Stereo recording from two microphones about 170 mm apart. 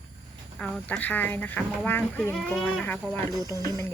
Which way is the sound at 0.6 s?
10° left (ahead or behind).